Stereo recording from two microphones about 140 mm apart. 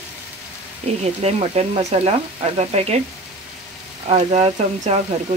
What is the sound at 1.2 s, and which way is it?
Speech, 50° right (ahead or behind).